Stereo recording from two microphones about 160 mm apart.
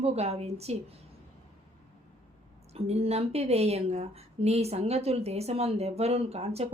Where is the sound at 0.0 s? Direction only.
40° right (ahead or behind).